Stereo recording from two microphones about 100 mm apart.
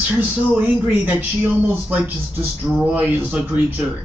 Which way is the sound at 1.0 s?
20° right (ahead or behind).